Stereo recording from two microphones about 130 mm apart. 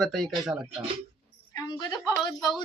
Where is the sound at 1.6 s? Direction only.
35° left (ahead or behind).